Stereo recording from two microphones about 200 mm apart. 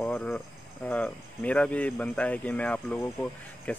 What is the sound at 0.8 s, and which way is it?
Speech, 5° left (ahead or behind).